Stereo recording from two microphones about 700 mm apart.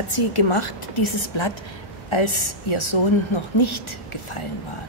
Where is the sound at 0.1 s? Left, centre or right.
Left.